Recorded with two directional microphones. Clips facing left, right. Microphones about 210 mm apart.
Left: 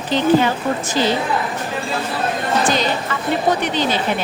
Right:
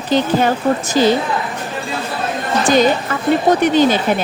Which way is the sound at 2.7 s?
50° right (ahead or behind).